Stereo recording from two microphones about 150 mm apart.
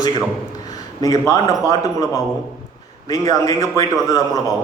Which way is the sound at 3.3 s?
25° left (ahead or behind).